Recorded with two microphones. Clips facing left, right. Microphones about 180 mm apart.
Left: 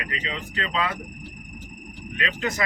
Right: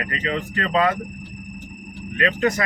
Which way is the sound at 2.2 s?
50° right (ahead or behind).